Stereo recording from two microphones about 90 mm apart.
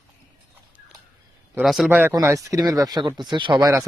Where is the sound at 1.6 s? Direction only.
Centre (ahead or behind).